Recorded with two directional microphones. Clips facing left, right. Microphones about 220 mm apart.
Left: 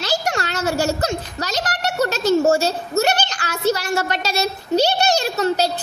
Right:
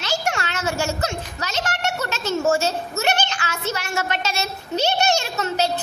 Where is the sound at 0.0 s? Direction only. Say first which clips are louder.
Left 3 dB; 35° left (ahead or behind).